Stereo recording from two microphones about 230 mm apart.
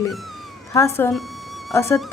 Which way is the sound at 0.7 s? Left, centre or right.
Centre.